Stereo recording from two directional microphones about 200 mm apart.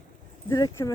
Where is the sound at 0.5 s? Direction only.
20° left (ahead or behind).